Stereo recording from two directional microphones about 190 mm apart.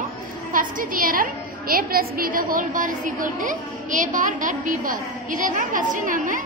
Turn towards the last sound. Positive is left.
turn(degrees=-45)  # may be behind; listen again after turning